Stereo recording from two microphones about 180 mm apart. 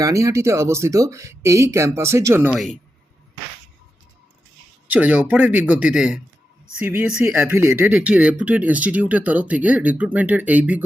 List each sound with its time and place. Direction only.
0.0 s speech: 20° right (ahead or behind)
4.9 s speech: 10° right (ahead or behind)